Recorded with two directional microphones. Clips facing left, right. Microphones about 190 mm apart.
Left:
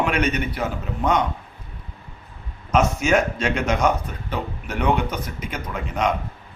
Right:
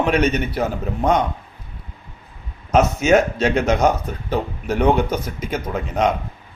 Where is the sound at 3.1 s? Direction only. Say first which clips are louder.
Right 5 dB; 40° right (ahead or behind).